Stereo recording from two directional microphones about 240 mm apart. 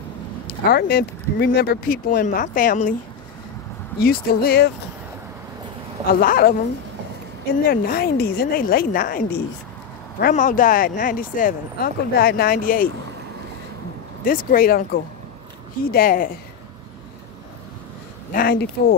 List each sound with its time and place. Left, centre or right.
0.7 s speech: left
4.0 s speech: left
6.1 s speech: left
7.6 s speech: left
14.2 s speech: left
18.3 s speech: left